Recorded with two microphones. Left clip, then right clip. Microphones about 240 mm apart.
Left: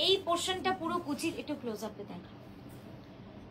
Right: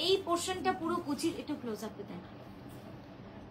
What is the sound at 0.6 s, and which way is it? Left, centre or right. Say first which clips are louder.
Speech: even; left.